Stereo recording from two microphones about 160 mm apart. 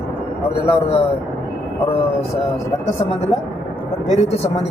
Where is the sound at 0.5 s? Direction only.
40° left (ahead or behind).